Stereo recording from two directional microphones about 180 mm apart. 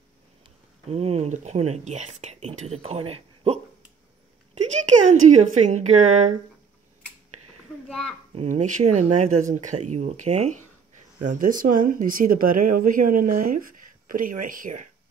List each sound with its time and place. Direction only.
0.8 s speech: 35° right (ahead or behind)
4.8 s speech: 40° right (ahead or behind)
8.4 s speech: 40° right (ahead or behind)